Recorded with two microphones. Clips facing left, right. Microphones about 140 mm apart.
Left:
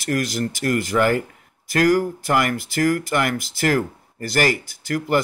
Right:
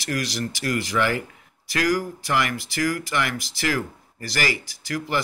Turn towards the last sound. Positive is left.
turn(degrees=55)  # may be behind; listen again after turning